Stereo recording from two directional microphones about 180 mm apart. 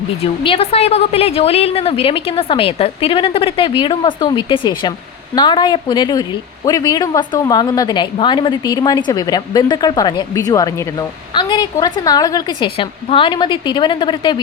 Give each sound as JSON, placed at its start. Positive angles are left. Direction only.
{"t": 0.4, "sound": "a woman's voice", "side_deg": 30}